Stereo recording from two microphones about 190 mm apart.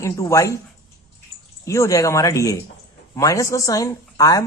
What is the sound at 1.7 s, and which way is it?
A woman's voice, 15° left (ahead or behind).